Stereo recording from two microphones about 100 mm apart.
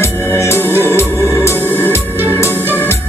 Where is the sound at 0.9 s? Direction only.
25° left (ahead or behind).